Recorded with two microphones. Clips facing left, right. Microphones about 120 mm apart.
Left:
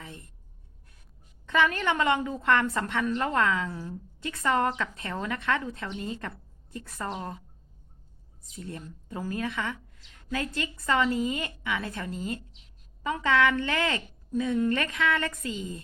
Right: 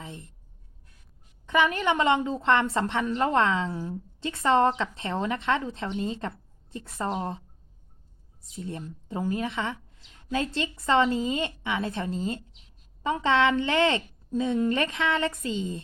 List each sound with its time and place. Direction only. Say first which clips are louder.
0.0 s speech: right 3 dB; 20° right (ahead or behind)
1.5 s speech: right 2 dB; 20° right (ahead or behind)
8.5 s speech: right 4 dB; 25° right (ahead or behind)